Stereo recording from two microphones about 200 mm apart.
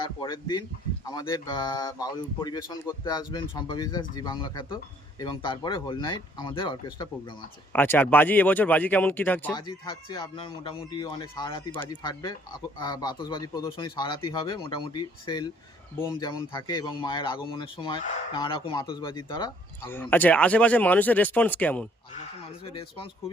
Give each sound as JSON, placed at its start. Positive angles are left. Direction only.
{"t": 0.0, "sound": "speech", "side_deg": 25}
{"t": 7.7, "sound": "speech", "side_deg": 10}
{"t": 9.5, "sound": "speech", "side_deg": 20}
{"t": 19.9, "sound": "speech", "side_deg": 10}
{"t": 22.6, "sound": "speech", "side_deg": 25}